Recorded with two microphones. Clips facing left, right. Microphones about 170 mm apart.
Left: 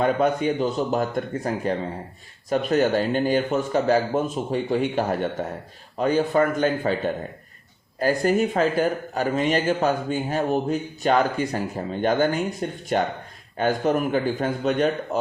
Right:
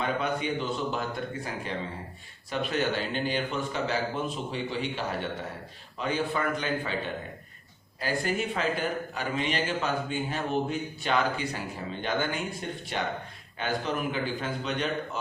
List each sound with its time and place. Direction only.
0.0 s a man's voice: 45° left (ahead or behind)